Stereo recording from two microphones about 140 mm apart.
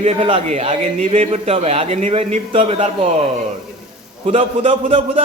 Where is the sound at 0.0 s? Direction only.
45° right (ahead or behind).